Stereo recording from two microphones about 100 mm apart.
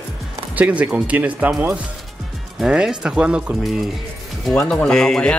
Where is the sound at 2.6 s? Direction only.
5° right (ahead or behind).